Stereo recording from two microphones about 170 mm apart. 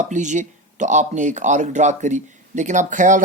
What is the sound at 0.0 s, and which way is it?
Speech, 45° right (ahead or behind).